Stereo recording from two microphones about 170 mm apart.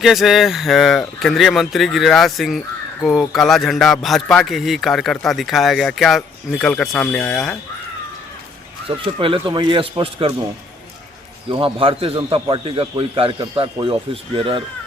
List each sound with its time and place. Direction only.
0.0 s a man's voice: centre (ahead or behind)
8.9 s a man's voice: 30° right (ahead or behind)
11.4 s a man's voice: 30° right (ahead or behind)